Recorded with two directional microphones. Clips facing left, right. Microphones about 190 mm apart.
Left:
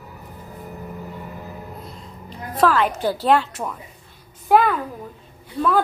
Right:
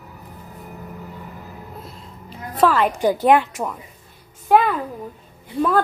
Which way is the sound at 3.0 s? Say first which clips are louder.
Right 3 dB; 15° right (ahead or behind).